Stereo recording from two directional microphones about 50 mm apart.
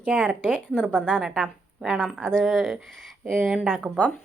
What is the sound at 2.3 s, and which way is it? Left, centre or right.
Speech, centre.